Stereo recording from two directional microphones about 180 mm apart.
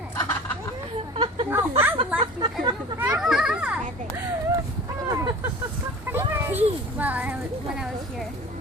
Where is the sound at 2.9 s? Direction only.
10° right (ahead or behind).